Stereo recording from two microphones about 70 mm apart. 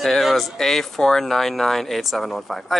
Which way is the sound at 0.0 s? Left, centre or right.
Centre.